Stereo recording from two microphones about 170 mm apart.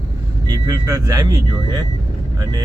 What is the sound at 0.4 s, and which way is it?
Speech, 20° right (ahead or behind).